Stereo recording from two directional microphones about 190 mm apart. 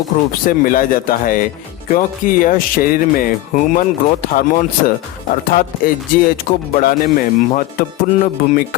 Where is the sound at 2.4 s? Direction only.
50° left (ahead or behind).